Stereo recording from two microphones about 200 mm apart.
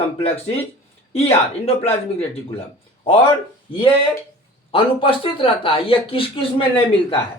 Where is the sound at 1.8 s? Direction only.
30° left (ahead or behind).